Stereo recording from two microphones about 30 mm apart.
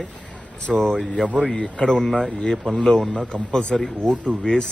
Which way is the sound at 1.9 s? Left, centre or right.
Centre.